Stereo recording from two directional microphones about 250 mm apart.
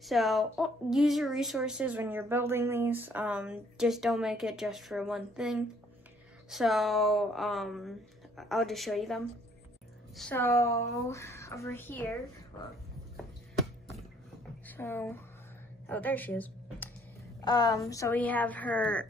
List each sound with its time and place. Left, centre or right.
0.0 s a woman's voice: centre
14.7 s speech: centre